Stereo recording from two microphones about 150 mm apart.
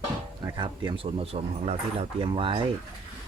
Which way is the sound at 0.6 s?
35° right (ahead or behind).